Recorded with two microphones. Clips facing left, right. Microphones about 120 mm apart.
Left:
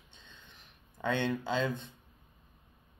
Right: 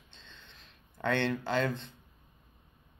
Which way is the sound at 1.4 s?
15° left (ahead or behind).